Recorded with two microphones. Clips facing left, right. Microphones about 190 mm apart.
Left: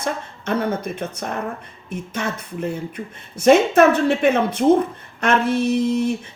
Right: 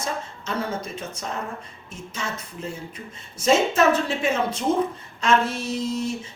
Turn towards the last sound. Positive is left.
turn(degrees=60)  # may be behind; listen again after turning